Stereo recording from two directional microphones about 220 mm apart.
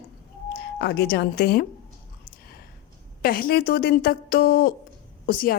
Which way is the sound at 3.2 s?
40° left (ahead or behind).